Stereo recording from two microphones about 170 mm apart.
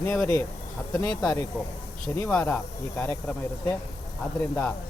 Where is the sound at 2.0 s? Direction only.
5° left (ahead or behind).